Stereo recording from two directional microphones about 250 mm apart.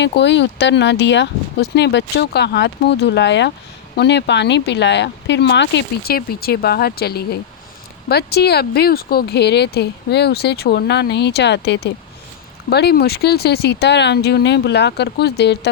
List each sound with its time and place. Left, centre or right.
0.0 s speech: left